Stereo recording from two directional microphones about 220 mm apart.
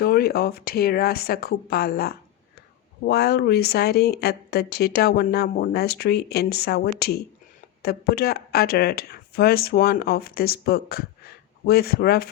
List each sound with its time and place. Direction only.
0.0 s speech: 45° left (ahead or behind)